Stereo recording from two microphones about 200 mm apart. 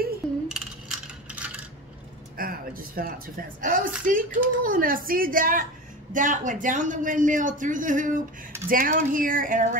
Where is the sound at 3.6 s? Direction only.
45° right (ahead or behind).